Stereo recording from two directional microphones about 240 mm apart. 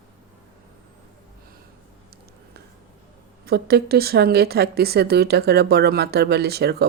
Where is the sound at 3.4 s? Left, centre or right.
Right.